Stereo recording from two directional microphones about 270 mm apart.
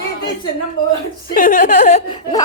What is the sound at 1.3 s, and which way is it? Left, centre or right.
Speech, left.